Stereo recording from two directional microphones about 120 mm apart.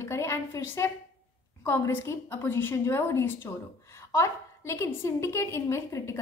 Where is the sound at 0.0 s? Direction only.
20° left (ahead or behind).